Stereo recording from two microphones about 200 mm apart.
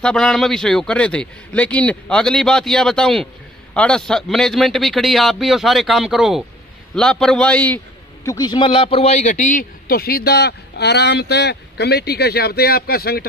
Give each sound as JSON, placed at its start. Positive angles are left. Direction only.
{"t": 0.0, "sound": "a man's voice", "side_deg": 5}
{"t": 8.3, "sound": "speech", "side_deg": 20}